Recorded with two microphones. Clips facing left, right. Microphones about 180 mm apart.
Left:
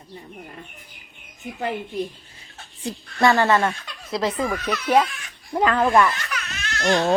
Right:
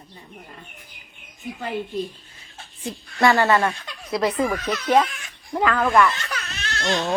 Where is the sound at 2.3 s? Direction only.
35° left (ahead or behind).